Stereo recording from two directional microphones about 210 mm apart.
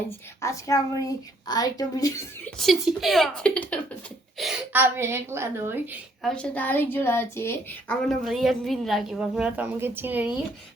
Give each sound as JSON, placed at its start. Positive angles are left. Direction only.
{"t": 0.4, "sound": "a woman's voice", "side_deg": 15}
{"t": 2.6, "sound": "a woman's voice", "side_deg": 0}
{"t": 6.2, "sound": "a woman's voice", "side_deg": 5}